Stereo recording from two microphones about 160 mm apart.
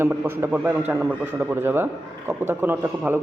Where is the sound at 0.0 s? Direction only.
15° right (ahead or behind).